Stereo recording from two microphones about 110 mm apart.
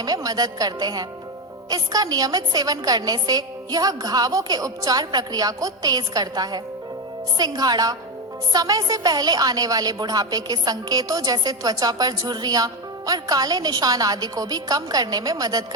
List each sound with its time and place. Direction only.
0.0 s a woman's voice: 35° right (ahead or behind)